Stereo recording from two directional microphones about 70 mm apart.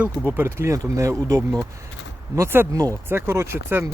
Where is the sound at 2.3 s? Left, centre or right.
Right.